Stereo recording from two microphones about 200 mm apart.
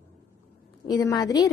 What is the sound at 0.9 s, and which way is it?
Speech, 20° left (ahead or behind).